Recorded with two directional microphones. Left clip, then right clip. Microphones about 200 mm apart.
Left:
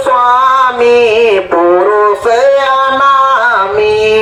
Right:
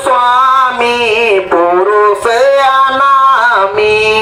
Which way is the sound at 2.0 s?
30° right (ahead or behind).